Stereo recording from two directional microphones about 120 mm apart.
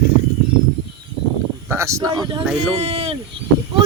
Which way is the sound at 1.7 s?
25° right (ahead or behind).